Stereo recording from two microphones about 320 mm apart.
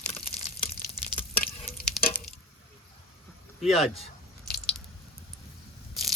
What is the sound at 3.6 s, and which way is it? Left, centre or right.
Speech, centre.